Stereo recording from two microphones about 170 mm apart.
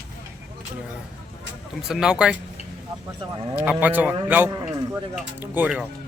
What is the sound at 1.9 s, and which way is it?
Speech, 5° right (ahead or behind).